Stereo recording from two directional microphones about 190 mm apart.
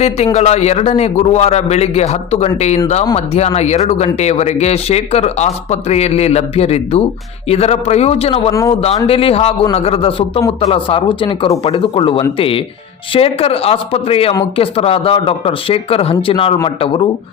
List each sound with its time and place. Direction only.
0.3 s speech: 35° left (ahead or behind)